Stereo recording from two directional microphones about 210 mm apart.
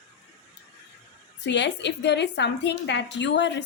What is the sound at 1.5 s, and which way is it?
Speech, 55° left (ahead or behind).